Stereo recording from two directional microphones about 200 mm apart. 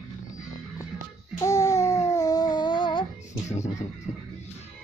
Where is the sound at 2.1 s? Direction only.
20° left (ahead or behind).